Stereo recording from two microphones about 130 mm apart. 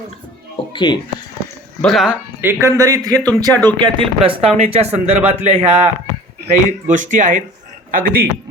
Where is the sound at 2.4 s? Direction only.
20° right (ahead or behind).